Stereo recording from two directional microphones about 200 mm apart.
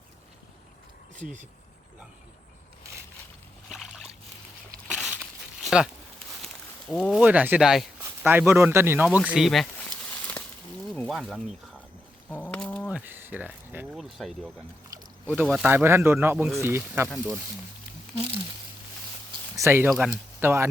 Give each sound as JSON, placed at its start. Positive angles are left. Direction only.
{"t": 1.1, "sound": "speech", "side_deg": -35}
{"t": 3.7, "sound": "a sound", "side_deg": 0}
{"t": 10.9, "sound": "speech", "side_deg": 5}
{"t": 12.3, "sound": "bird", "side_deg": 5}
{"t": 12.9, "sound": "speech", "side_deg": -10}
{"t": 19.5, "sound": "speech", "side_deg": -15}